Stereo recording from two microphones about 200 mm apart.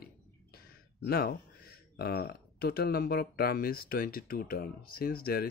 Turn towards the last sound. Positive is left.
turn(degrees=50)  # may be behind; listen again after turning